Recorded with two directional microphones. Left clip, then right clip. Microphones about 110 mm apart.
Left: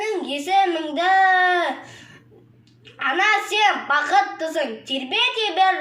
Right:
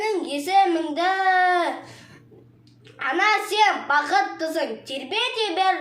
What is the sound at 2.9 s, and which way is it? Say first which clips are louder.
A child's voice: left 2 dB; 25° right (ahead or behind).